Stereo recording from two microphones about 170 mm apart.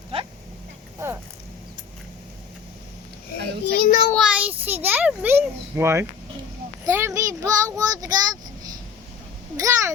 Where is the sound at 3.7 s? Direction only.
50° left (ahead or behind).